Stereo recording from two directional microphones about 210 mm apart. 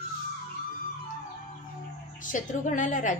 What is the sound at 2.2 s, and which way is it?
Speech, 40° left (ahead or behind).